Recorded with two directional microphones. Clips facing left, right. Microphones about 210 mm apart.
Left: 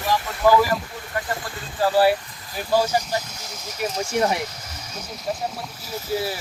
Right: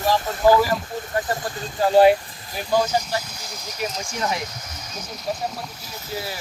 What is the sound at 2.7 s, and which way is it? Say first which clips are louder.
Speech: even; 10° left (ahead or behind).